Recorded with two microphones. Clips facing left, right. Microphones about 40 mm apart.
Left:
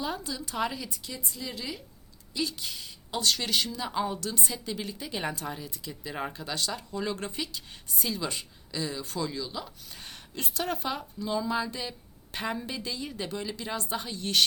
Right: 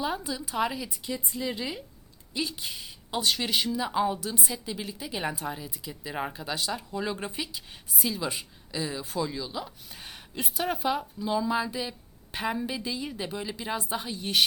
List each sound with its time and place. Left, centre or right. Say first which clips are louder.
0.0 s speech: right 3 dB; centre
0.9 s speech: right 5 dB; centre